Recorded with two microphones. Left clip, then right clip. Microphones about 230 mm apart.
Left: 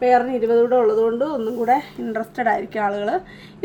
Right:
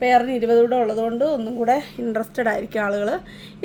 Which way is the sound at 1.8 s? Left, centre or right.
Right.